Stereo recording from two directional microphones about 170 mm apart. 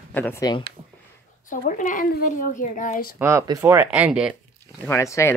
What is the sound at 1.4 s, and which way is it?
Speech, 50° left (ahead or behind).